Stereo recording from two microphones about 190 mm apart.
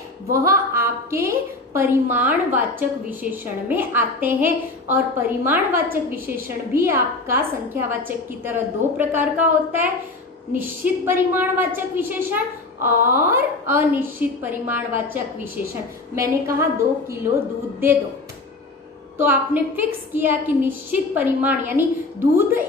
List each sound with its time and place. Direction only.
0.3 s a woman's voice: 15° right (ahead or behind)
19.1 s a woman's voice: 10° right (ahead or behind)